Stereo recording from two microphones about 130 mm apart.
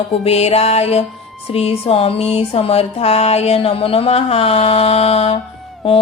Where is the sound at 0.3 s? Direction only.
55° left (ahead or behind).